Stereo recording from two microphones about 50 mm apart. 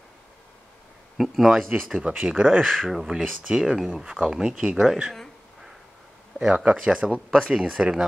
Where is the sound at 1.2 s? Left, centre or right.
Centre; by 2.6 s right.